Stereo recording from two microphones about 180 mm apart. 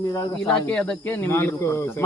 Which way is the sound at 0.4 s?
5° left (ahead or behind).